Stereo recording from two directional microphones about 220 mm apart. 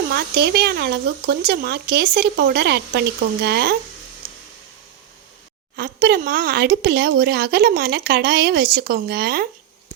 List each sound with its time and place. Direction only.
0.1 s speech: 45° right (ahead or behind)
5.7 s speech: 45° right (ahead or behind)